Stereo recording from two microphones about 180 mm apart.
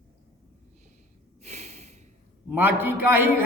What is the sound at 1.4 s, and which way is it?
Snort, 40° right (ahead or behind).